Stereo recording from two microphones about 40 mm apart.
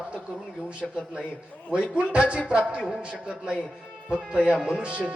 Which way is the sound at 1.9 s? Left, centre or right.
Right.